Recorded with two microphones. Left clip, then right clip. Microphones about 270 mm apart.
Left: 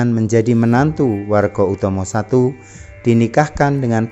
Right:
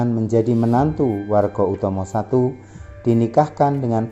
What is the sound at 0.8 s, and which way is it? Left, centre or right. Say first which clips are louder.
Speech: left 3 dB; left.